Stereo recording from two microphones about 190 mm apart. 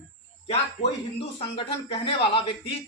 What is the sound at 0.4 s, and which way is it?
A man's voice, 30° left (ahead or behind).